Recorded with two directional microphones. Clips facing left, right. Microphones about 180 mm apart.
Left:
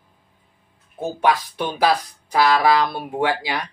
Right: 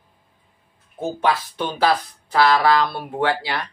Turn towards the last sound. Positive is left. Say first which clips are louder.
# even
turn(degrees=15)  # may be behind; listen again after turning